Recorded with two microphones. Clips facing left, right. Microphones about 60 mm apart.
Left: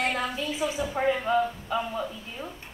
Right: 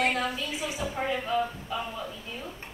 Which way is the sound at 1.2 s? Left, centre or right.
Left.